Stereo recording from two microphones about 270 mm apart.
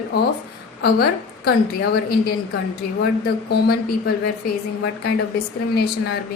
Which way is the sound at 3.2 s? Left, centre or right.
Left.